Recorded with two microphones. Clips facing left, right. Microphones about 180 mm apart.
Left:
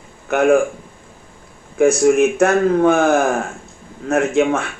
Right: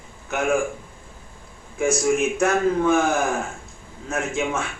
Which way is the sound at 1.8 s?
60° left (ahead or behind).